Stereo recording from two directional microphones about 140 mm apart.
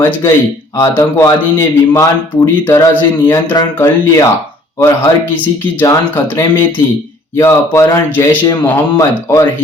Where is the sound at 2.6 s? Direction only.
15° left (ahead or behind).